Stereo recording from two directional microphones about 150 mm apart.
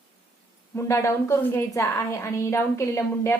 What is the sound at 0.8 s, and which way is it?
A woman's voice, 20° left (ahead or behind).